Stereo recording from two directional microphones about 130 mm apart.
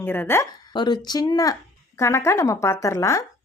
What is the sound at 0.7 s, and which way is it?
A woman's voice, 35° left (ahead or behind).